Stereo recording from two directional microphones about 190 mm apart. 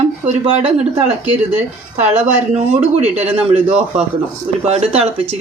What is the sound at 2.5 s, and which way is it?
Speech, 35° right (ahead or behind).